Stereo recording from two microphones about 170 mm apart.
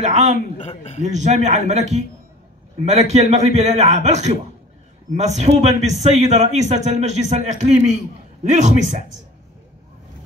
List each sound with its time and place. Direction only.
0.0 s a man's voice: 40° right (ahead or behind)
0.6 s a man's voice: 35° left (ahead or behind)
1.1 s a man's voice: 40° right (ahead or behind)